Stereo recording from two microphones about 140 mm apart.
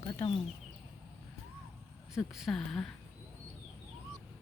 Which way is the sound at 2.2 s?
Centre (ahead or behind).